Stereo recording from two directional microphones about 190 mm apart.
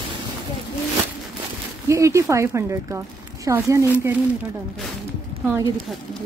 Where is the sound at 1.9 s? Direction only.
15° right (ahead or behind).